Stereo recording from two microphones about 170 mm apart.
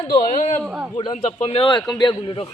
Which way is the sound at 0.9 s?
35° left (ahead or behind).